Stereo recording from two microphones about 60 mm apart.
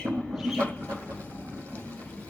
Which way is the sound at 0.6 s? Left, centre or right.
Left.